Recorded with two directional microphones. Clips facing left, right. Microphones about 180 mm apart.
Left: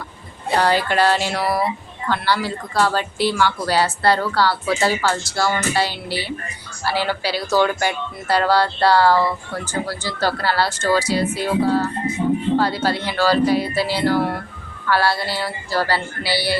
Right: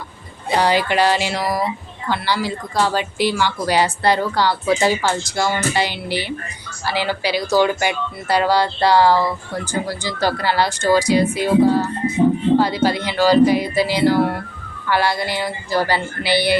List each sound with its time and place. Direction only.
0.5 s speech: 10° right (ahead or behind)